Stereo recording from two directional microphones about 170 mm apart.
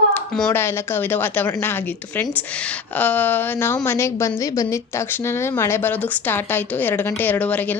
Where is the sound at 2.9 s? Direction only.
10° left (ahead or behind).